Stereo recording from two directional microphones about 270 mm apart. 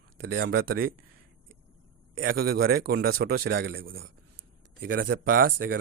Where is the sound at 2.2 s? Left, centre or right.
Right.